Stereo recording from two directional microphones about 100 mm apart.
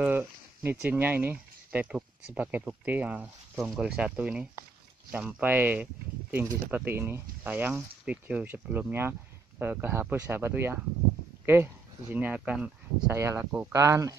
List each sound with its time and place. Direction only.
0.0 s speech: 15° right (ahead or behind)
3.5 s speech: 5° right (ahead or behind)
13.1 s speech: 25° right (ahead or behind)
13.5 s speech: 15° right (ahead or behind)
13.7 s speech: 30° right (ahead or behind)